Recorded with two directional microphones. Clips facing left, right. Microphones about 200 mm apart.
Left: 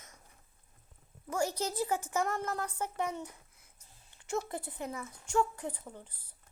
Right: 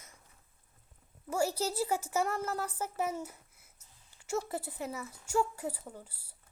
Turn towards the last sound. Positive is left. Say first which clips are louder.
# right 1 dB
turn(degrees=-10)  # may be behind; listen again after turning